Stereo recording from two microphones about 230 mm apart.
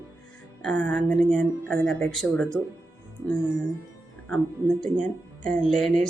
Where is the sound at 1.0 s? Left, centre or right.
Right.